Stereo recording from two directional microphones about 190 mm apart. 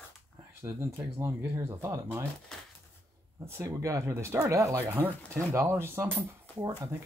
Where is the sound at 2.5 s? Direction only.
5° left (ahead or behind).